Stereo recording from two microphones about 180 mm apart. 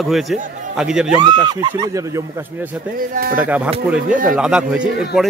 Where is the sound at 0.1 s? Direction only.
Centre (ahead or behind).